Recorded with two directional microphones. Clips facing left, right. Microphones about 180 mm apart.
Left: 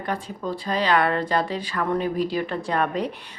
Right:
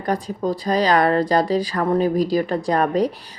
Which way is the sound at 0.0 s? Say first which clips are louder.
Right 6 dB; 40° right (ahead or behind).